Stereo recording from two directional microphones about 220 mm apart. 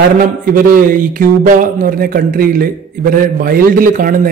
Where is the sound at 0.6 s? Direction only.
40° right (ahead or behind).